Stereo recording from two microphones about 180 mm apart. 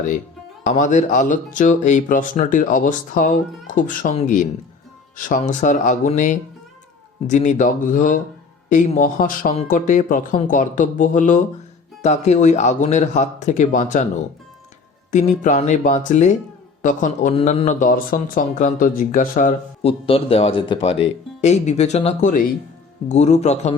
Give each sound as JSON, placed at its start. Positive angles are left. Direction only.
{"t": 0.6, "sound": "speech", "side_deg": 45}
{"t": 15.1, "sound": "speech", "side_deg": 40}
{"t": 17.3, "sound": "speech", "side_deg": 35}